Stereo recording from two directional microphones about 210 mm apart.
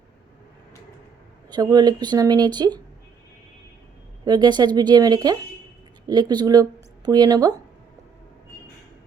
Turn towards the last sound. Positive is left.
turn(degrees=-15)  # may be behind; listen again after turning